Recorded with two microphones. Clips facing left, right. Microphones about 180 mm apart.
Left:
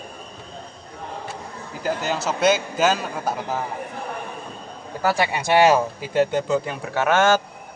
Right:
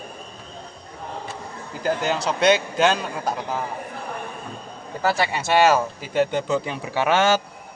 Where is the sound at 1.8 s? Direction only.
5° left (ahead or behind).